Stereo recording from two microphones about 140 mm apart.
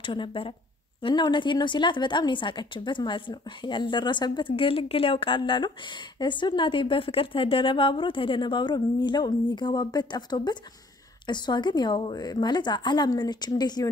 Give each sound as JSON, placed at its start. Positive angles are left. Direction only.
{"t": 0.0, "sound": "a woman's voice", "side_deg": 35}